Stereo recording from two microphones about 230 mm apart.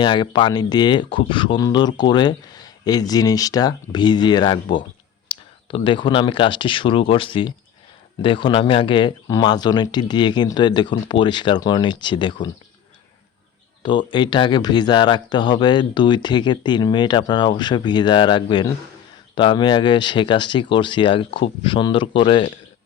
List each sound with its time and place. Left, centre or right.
0.0 s speech: centre
14.1 s speech: centre